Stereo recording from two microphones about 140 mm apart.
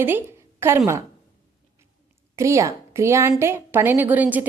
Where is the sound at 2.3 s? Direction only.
20° right (ahead or behind).